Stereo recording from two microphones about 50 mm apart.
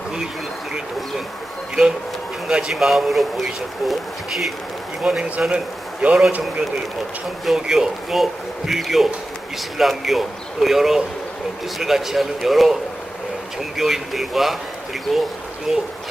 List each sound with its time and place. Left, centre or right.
2.5 s speech: centre
2.7 s a man's voice: centre
5.0 s speech: centre
5.5 s a man's voice: right
7.4 s a man's voice: centre
15.7 s speech: centre